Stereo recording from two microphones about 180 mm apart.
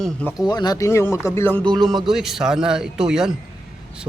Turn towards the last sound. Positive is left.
turn(degrees=-5)  # may be behind; listen again after turning